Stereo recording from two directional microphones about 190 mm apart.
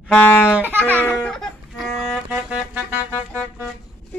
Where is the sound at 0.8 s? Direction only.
10° left (ahead or behind); by 3.4 s 10° right (ahead or behind).